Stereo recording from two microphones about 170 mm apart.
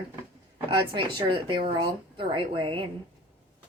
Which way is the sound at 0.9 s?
30° right (ahead or behind).